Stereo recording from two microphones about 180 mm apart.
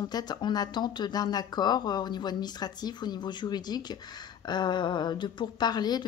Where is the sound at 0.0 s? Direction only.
25° left (ahead or behind).